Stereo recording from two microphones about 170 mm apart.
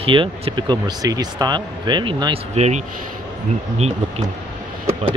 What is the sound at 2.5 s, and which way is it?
Speech, 40° right (ahead or behind).